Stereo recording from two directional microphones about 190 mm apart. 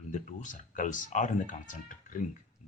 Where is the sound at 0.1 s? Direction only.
40° left (ahead or behind).